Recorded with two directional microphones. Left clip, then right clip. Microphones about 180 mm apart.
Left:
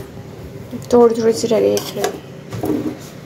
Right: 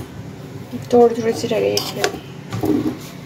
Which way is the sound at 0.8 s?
20° left (ahead or behind).